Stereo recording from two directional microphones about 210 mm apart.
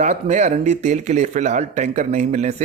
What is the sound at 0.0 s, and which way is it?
Speech, 35° right (ahead or behind).